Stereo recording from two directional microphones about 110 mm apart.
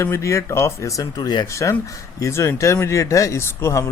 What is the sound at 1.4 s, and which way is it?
Speech, 30° left (ahead or behind).